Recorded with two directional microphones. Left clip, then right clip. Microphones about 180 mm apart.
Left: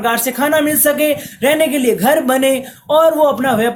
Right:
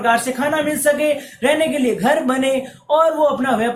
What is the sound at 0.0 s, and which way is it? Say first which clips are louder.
Speech: left 1 dB; 50° left (ahead or behind).